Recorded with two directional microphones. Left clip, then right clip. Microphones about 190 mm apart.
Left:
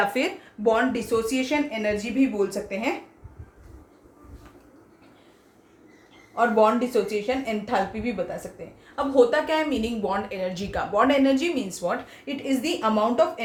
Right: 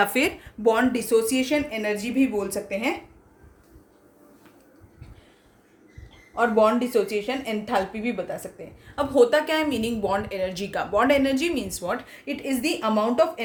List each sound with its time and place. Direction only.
0.0 s speech: 60° right (ahead or behind)
6.3 s speech: 40° right (ahead or behind)